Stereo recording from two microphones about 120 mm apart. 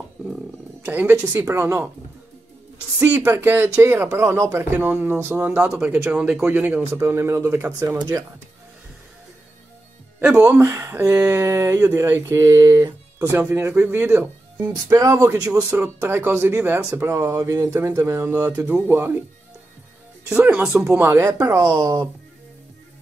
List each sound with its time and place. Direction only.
0.8 s speech: 15° right (ahead or behind)
1.1 s speech: 25° right (ahead or behind)
3.0 s speech: 15° right (ahead or behind)
10.5 s speech: 20° right (ahead or behind)
20.2 s speech: 15° right (ahead or behind)